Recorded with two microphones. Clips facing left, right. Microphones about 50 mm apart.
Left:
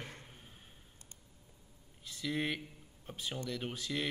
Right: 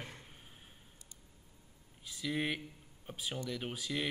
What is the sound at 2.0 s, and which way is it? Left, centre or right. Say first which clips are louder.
A man's voice: even; centre.